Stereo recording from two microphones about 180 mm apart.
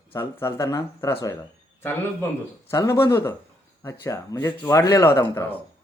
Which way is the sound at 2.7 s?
15° left (ahead or behind).